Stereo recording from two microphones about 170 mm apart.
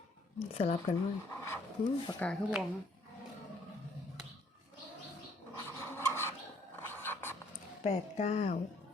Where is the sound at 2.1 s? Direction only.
10° left (ahead or behind).